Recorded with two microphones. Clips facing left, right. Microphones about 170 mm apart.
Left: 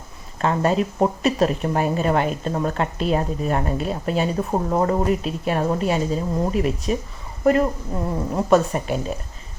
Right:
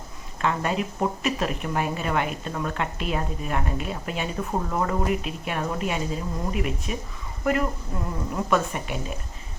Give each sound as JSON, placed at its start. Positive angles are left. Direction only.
{"t": 0.4, "sound": "a woman's voice", "side_deg": 35}